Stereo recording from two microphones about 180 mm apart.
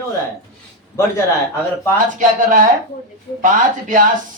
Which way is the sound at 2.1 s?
45° right (ahead or behind).